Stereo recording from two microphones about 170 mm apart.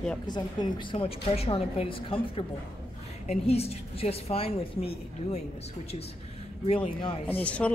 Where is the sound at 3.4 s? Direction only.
35° left (ahead or behind).